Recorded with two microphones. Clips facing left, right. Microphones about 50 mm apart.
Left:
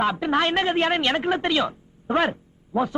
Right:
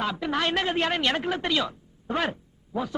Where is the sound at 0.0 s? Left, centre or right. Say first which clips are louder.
Left 5 dB; left.